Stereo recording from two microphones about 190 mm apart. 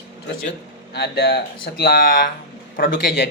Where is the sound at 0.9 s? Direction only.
60° left (ahead or behind).